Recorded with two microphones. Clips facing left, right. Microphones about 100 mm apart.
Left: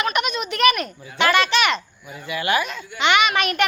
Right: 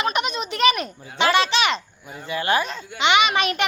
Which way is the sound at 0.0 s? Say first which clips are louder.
Left 1 dB; 30° right (ahead or behind).